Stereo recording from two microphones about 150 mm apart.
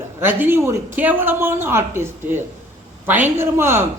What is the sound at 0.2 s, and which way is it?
A man's voice, 15° right (ahead or behind).